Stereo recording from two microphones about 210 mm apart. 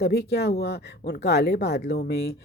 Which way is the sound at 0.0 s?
50° left (ahead or behind).